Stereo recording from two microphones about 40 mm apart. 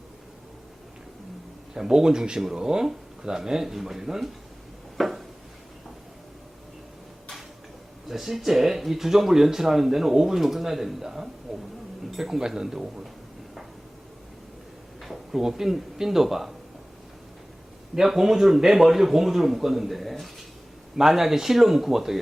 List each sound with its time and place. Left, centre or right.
1.7 s speech: centre
4.9 s a sound: centre
8.0 s speech: centre
15.0 s speech: centre
17.9 s speech: centre